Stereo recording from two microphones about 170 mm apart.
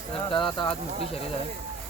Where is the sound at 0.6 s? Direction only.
30° left (ahead or behind).